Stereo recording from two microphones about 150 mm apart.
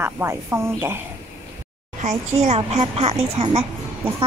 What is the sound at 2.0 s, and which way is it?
Speech, 50° right (ahead or behind).